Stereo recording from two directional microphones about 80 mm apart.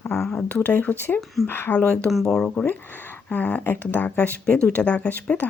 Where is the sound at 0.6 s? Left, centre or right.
Left.